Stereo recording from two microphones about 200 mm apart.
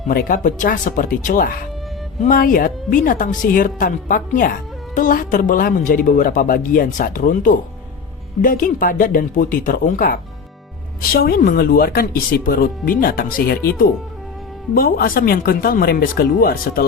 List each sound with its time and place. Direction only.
0.1 s a woman's voice: 45° left (ahead or behind)
14.8 s a woman's voice: 50° left (ahead or behind)